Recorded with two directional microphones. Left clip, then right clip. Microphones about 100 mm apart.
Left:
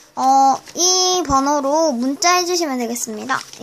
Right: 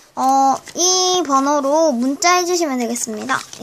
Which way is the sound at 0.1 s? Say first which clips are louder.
Left 1 dB; 15° right (ahead or behind).